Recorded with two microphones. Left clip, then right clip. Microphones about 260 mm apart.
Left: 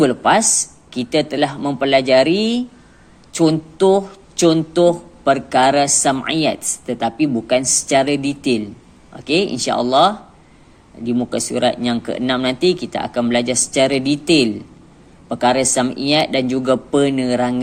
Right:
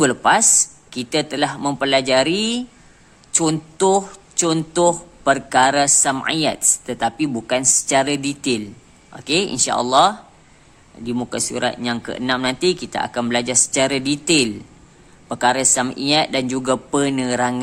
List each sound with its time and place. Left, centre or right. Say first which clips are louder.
0.0 s speech: left 1 dB; centre